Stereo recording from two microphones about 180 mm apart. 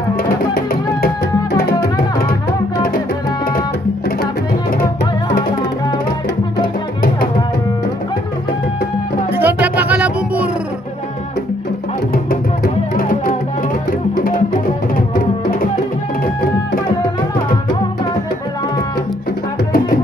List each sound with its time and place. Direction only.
0.6 s music: 55° left (ahead or behind)
9.3 s music: 10° right (ahead or behind)